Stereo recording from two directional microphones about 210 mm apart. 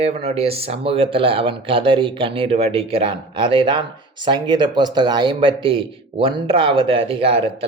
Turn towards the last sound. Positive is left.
turn(degrees=-25)  # may be behind; listen again after turning